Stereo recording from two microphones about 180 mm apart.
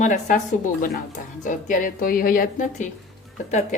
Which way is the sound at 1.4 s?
50° left (ahead or behind).